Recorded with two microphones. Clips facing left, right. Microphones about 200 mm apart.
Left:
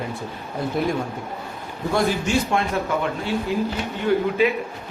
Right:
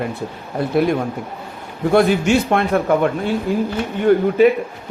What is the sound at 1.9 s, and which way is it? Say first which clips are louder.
A man's voice: right 7 dB; 60° right (ahead or behind).